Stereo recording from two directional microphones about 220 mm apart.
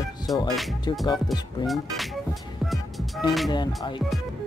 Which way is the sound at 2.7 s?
Centre (ahead or behind).